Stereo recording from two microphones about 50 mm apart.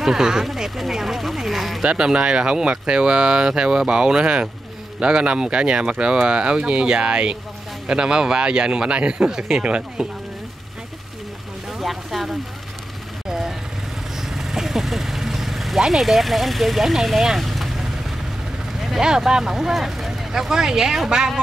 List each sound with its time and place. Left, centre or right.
0.0 s speech: centre
0.6 s a sound: centre
1.8 s speech: centre
11.8 s a sound: centre
14.3 s vehicle: centre
18.9 s speech: centre